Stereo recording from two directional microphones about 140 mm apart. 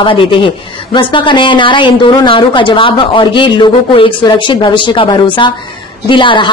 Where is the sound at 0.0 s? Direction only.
40° left (ahead or behind).